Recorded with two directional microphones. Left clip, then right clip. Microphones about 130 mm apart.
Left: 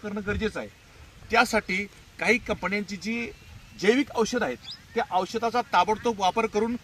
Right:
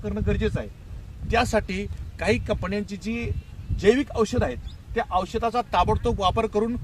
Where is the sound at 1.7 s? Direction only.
70° right (ahead or behind).